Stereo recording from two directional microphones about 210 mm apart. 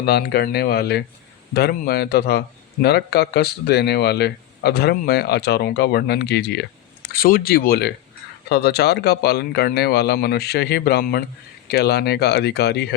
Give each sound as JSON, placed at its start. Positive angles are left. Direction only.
{"t": 0.0, "sound": "speech", "side_deg": 50}